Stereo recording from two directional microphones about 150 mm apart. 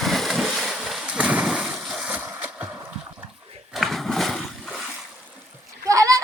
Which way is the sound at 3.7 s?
Centre (ahead or behind).